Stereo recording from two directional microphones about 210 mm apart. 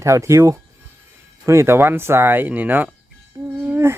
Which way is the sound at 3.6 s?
10° right (ahead or behind).